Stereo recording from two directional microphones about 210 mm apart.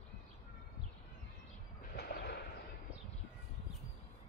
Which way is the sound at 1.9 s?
50° left (ahead or behind).